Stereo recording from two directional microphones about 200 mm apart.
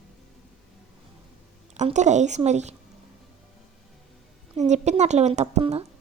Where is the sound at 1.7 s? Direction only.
35° right (ahead or behind).